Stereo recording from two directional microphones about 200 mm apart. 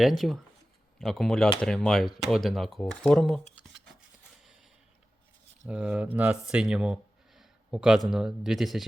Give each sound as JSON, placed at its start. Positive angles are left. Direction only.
{"t": 0.0, "sound": "speech", "side_deg": 0}
{"t": 5.6, "sound": "speech", "side_deg": -5}